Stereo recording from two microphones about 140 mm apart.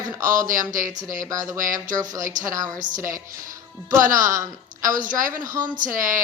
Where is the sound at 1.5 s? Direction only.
70° right (ahead or behind).